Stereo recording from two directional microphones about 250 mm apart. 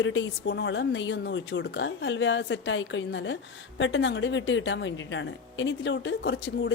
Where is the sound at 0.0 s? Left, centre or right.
Left.